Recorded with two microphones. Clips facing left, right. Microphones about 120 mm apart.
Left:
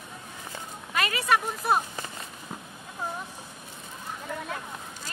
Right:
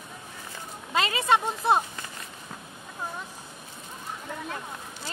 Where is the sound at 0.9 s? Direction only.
25° right (ahead or behind).